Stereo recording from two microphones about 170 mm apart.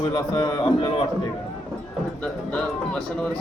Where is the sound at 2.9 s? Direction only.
5° left (ahead or behind).